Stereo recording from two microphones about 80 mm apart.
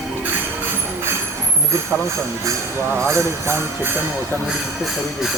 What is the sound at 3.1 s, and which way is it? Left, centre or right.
Speech, right.